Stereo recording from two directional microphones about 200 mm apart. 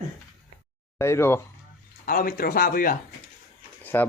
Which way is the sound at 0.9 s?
10° left (ahead or behind).